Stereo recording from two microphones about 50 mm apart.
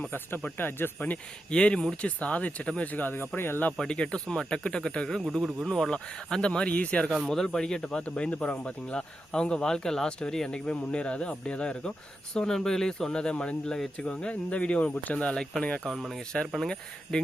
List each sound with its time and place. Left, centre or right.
0.1 s speech: left
1.5 s speech: centre
2.9 s speech: left
3.8 s speech: centre
7.8 s speech: left
13.7 s speech: centre; by 15.4 s left
15.8 s speech: centre